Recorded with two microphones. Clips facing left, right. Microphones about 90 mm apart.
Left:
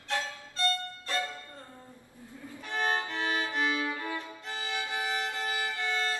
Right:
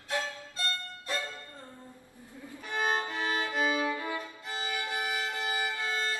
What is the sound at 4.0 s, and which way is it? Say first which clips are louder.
Violin: right 1 dB; 10° right (ahead or behind).